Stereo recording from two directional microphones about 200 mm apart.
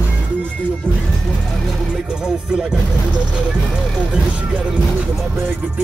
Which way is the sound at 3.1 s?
5° right (ahead or behind).